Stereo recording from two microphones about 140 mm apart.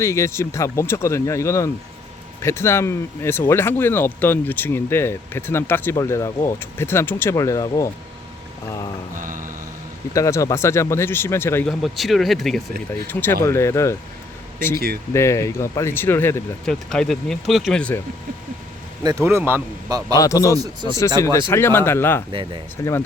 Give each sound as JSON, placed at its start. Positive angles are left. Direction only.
{"t": 0.0, "sound": "speech", "side_deg": 20}
{"t": 9.1, "sound": "music", "side_deg": -70}
{"t": 10.2, "sound": "speech", "side_deg": 20}
{"t": 11.8, "sound": "speech", "side_deg": 0}
{"t": 13.1, "sound": "speech", "side_deg": 15}
{"t": 15.1, "sound": "speech", "side_deg": 20}
{"t": 16.6, "sound": "speech", "side_deg": 5}
{"t": 19.0, "sound": "speech", "side_deg": -20}
{"t": 20.1, "sound": "speech", "side_deg": 25}
{"t": 22.3, "sound": "speech", "side_deg": -35}
{"t": 22.8, "sound": "speech", "side_deg": 20}